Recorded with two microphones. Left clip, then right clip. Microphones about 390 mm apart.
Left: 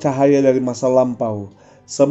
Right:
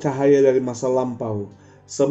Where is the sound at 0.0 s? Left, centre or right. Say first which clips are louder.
Left 2 dB; left.